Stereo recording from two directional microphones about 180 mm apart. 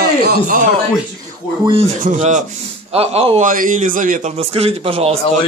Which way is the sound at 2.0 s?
40° right (ahead or behind).